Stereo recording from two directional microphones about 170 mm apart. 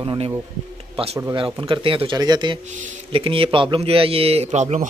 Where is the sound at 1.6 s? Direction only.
30° right (ahead or behind).